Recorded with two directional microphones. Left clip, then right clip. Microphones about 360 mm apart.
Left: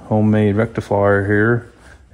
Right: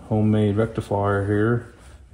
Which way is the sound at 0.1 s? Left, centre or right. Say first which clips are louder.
Left 6 dB; centre.